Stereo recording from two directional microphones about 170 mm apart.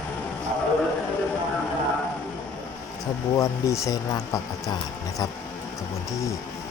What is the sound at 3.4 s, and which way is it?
Speech, 20° left (ahead or behind).